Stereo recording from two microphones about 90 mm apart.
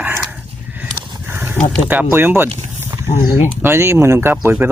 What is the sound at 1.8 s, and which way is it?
Speech, 20° right (ahead or behind).